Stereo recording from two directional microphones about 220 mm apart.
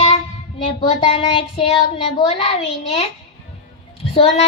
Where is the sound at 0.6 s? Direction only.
25° left (ahead or behind).